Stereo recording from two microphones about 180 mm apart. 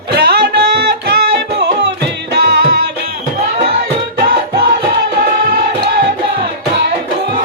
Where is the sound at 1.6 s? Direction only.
70° right (ahead or behind).